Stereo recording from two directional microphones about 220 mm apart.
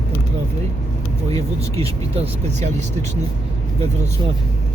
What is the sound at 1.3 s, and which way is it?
Speech, 25° right (ahead or behind).